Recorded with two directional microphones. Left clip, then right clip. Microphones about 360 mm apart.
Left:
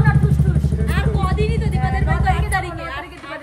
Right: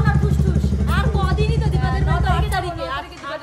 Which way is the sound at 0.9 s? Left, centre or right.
Centre.